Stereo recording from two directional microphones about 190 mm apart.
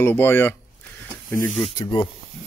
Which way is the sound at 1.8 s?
20° left (ahead or behind).